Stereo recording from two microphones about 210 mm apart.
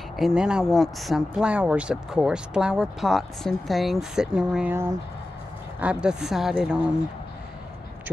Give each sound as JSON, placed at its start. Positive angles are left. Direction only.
{"t": 0.2, "sound": "speech", "side_deg": -5}